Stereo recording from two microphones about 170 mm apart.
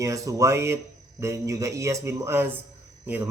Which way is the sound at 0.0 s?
20° right (ahead or behind).